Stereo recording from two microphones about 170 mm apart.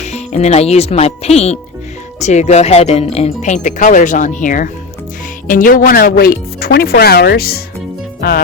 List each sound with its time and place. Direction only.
0.0 s speech: 40° left (ahead or behind); by 8.4 s 60° left (ahead or behind)